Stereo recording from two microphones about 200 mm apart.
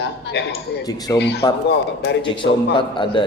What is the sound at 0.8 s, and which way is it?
Speech, 20° left (ahead or behind).